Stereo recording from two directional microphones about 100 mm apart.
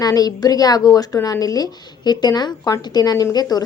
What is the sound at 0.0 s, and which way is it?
A woman's voice, 40° left (ahead or behind).